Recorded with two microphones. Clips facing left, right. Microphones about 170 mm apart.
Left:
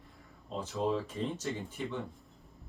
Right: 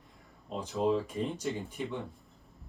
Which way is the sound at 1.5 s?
Centre (ahead or behind).